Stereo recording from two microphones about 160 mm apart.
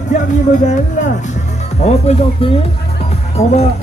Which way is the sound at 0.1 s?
50° left (ahead or behind).